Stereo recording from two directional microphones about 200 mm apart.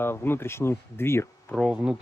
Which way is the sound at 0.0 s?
10° left (ahead or behind).